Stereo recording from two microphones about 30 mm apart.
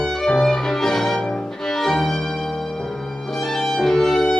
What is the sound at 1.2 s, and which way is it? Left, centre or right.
Violin, left.